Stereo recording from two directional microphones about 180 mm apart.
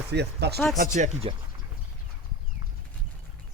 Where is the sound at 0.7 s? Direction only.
45° right (ahead or behind).